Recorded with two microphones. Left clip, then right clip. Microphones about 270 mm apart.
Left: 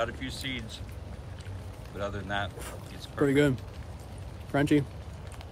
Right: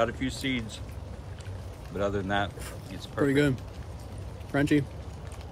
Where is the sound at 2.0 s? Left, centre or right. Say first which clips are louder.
Right 5 dB; right.